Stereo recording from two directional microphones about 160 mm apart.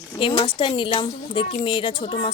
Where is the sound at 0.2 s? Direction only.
30° left (ahead or behind).